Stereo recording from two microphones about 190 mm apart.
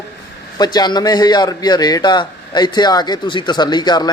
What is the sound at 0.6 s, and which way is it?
A man's voice, 20° left (ahead or behind).